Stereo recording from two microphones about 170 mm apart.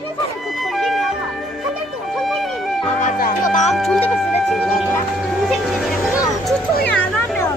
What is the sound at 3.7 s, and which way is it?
Speech, centre (ahead or behind).